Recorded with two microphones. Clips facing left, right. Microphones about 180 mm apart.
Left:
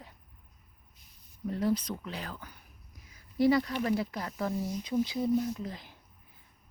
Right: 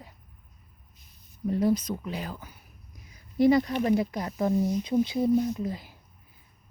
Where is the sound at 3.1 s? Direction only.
20° right (ahead or behind).